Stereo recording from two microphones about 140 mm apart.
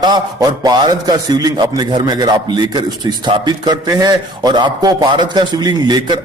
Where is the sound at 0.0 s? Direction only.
30° right (ahead or behind).